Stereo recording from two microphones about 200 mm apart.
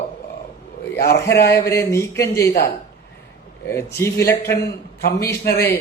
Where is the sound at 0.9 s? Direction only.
50° left (ahead or behind).